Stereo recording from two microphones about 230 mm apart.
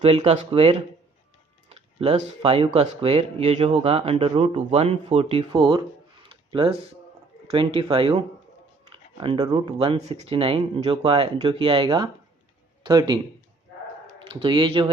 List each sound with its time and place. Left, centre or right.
0.0 s speech: right
14.3 s speech: right